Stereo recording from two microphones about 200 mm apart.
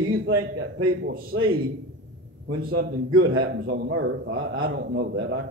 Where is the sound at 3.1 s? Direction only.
90° right.